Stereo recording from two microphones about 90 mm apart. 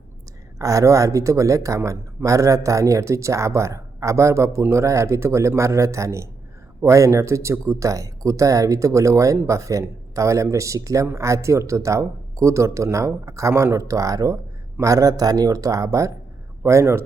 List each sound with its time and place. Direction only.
0.6 s a man's voice: 35° right (ahead or behind)